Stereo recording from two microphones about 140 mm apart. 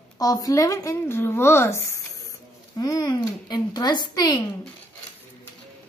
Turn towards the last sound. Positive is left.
turn(degrees=30)  # may be behind; listen again after turning